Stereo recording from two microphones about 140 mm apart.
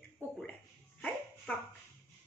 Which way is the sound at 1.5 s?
10° left (ahead or behind).